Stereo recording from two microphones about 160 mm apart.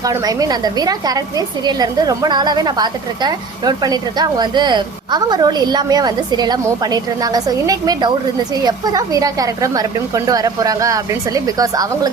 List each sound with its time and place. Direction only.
0.0 s a woman's voice: 20° right (ahead or behind)